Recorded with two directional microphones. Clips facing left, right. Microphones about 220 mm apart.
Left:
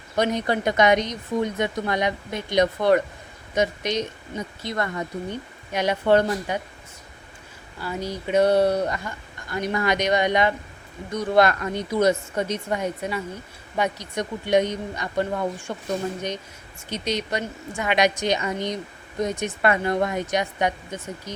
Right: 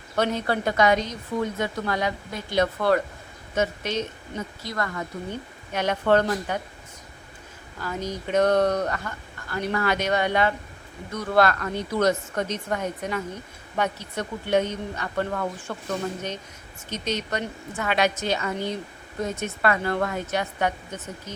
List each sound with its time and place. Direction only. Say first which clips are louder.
0.2 s speech: left 2 dB; 15° left (ahead or behind)
5.7 s speech: left 2 dB; 10° left (ahead or behind)
7.8 s speech: left 1 dB; 10° left (ahead or behind)
16.9 s speech: left 2 dB; 10° left (ahead or behind)